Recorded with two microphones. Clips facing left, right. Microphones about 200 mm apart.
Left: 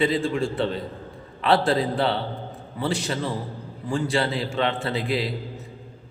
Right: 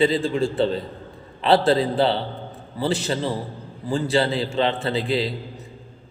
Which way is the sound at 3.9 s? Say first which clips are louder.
Right 3 dB; 30° right (ahead or behind).